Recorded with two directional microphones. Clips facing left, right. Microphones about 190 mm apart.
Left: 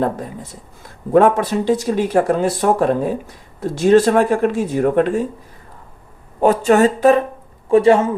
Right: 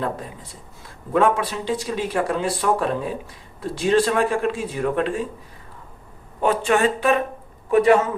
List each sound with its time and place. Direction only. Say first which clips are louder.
1.1 s speech: left 6 dB; 40° left (ahead or behind)
6.4 s speech: left 6 dB; 40° left (ahead or behind)
7.7 s a man's voice: left 4 dB; 30° left (ahead or behind)